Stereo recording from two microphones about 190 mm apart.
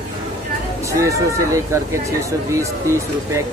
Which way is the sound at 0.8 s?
15° right (ahead or behind).